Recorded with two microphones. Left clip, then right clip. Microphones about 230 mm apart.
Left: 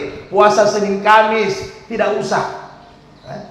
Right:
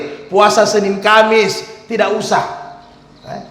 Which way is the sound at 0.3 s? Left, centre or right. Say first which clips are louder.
Right 1 dB; right.